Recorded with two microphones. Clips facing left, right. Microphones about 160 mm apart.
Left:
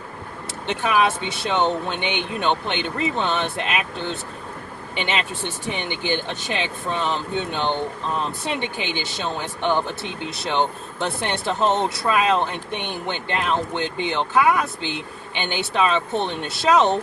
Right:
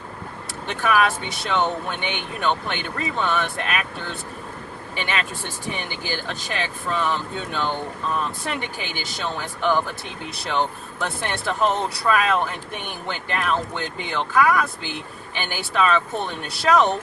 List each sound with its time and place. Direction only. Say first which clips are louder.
0.7 s speech: even; 20° left (ahead or behind)